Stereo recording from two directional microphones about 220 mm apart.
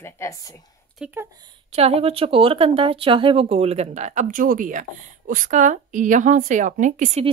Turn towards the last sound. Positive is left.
turn(degrees=-30)  # may be behind; listen again after turning